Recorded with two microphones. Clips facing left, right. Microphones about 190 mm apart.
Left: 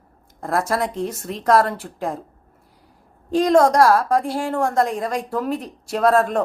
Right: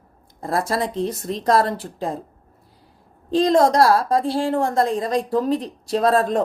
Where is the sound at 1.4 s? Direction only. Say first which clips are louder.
Left 1 dB; 35° right (ahead or behind).